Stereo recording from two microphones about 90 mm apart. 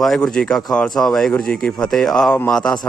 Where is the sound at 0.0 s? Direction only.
5° left (ahead or behind).